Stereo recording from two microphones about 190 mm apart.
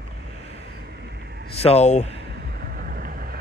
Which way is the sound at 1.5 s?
30° left (ahead or behind).